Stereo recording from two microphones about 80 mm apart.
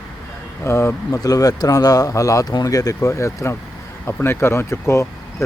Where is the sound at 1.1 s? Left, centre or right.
Left.